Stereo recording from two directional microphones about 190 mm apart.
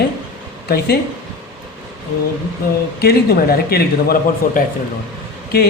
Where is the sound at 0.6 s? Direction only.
55° left (ahead or behind).